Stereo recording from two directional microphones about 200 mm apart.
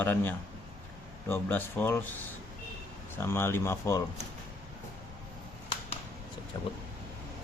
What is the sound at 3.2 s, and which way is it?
Speech, 10° left (ahead or behind).